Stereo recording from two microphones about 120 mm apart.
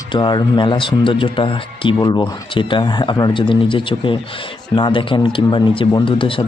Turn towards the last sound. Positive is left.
turn(degrees=45)  # may be behind; listen again after turning